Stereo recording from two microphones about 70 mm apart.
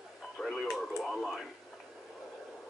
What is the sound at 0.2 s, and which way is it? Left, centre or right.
Radio, centre.